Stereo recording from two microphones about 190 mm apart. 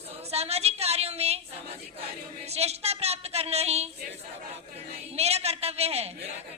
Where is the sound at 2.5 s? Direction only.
35° right (ahead or behind).